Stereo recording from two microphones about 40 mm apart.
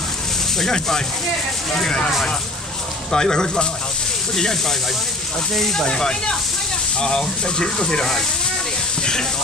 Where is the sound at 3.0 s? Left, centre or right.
Centre.